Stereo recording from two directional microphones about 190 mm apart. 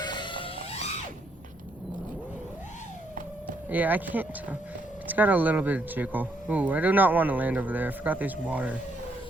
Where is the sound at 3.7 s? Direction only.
10° right (ahead or behind).